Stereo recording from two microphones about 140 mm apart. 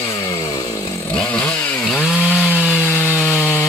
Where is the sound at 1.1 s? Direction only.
10° left (ahead or behind).